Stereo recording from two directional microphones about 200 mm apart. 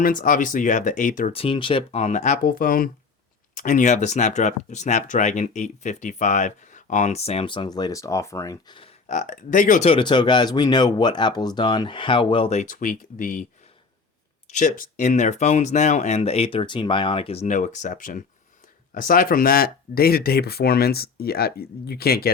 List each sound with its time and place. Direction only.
0.0 s speech: 40° left (ahead or behind)
1.3 s speech: 25° left (ahead or behind)
9.0 s speech: 40° left (ahead or behind)
9.9 s speech: 25° left (ahead or behind); by 13.4 s 40° left (ahead or behind)
14.5 s speech: 40° left (ahead or behind)